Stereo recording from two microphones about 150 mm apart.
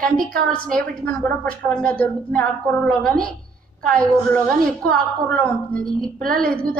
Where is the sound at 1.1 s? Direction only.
5° left (ahead or behind).